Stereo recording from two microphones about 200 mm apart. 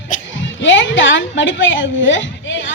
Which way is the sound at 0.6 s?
65° left (ahead or behind).